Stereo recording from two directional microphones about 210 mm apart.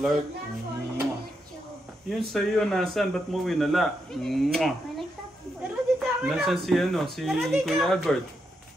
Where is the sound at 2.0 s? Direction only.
Centre (ahead or behind).